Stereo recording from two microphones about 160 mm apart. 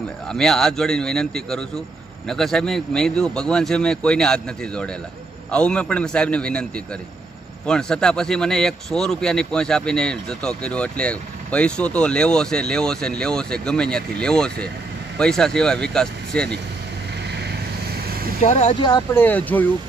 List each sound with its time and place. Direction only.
0.3 s a man's voice: 5° left (ahead or behind)
17.3 s vehicle: 90° right
18.0 s vehicle: 70° right (ahead or behind)
18.4 s speech: 45° left (ahead or behind)
18.7 s speech: 30° left (ahead or behind)
19.1 s a man's voice: 10° left (ahead or behind)